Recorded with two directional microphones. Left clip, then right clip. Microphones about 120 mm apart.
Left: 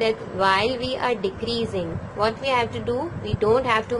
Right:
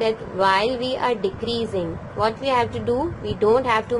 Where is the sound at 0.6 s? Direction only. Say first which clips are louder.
Right 2 dB; 15° right (ahead or behind).